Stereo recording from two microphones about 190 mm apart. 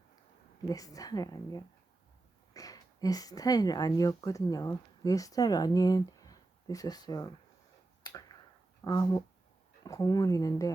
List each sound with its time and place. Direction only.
0.7 s a woman's voice: 20° left (ahead or behind)
8.8 s a woman's voice: 20° left (ahead or behind)